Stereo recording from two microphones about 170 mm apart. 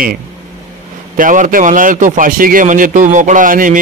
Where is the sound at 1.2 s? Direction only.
50° right (ahead or behind).